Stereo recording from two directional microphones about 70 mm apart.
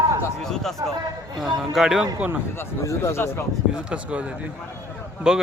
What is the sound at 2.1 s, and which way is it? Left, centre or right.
Speech, right.